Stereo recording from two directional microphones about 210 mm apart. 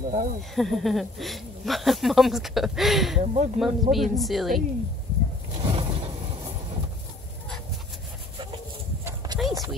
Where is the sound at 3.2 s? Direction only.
35° right (ahead or behind).